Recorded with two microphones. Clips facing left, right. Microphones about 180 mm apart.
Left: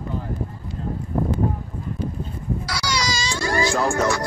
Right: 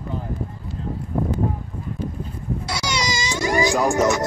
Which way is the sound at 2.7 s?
20° right (ahead or behind).